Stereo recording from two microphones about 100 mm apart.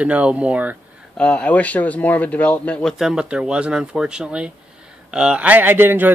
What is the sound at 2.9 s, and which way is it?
A man's voice, 5° right (ahead or behind).